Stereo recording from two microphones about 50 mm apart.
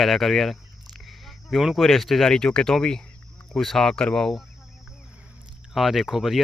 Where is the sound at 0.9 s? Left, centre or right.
Centre.